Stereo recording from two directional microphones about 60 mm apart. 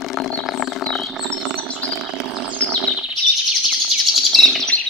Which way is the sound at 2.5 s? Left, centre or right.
Centre.